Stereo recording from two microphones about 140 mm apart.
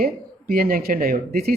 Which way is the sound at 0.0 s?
90° right.